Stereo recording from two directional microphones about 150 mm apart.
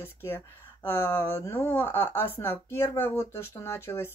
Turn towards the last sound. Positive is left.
turn(degrees=15)  # may be behind; listen again after turning